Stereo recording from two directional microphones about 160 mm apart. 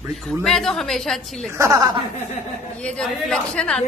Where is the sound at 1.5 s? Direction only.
20° right (ahead or behind).